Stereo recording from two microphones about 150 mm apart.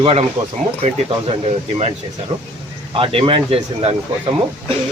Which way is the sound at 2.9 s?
40° right (ahead or behind).